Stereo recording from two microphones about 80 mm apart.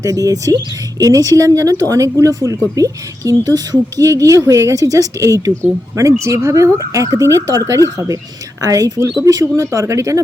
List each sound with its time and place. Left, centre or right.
0.0 s a woman's voice: right